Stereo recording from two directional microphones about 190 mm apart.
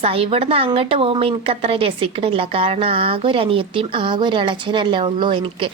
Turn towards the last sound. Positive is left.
turn(degrees=-25)  # may be behind; listen again after turning